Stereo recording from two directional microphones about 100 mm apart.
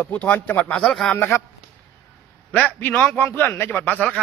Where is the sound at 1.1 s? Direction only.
20° left (ahead or behind).